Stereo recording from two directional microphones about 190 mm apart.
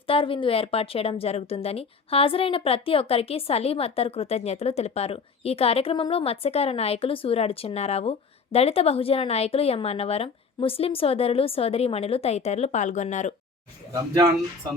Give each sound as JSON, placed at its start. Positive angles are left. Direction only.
{"t": 0.1, "sound": "a woman's voice", "side_deg": 30}